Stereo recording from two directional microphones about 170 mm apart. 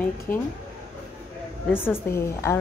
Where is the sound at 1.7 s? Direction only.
15° left (ahead or behind).